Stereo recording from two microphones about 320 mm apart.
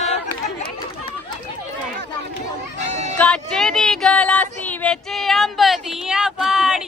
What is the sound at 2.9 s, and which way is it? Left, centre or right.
Music, right.